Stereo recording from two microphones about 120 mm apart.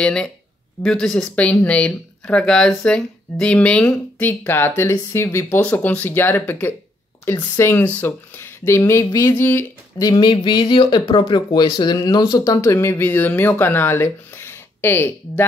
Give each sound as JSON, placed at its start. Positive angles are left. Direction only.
{"t": 0.0, "sound": "speech", "side_deg": 5}
{"t": 9.3, "sound": "speech", "side_deg": 15}
{"t": 9.9, "sound": "speech", "side_deg": 35}